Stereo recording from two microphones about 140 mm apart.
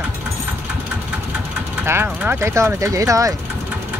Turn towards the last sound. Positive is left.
turn(degrees=-25)  # may be behind; listen again after turning